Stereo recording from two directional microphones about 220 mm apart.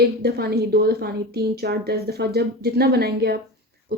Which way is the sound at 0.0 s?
45° right (ahead or behind).